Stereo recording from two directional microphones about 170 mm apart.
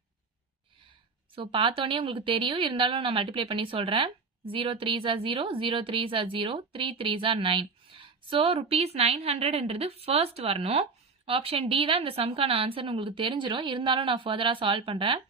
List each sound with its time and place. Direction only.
1.4 s speech: 30° right (ahead or behind)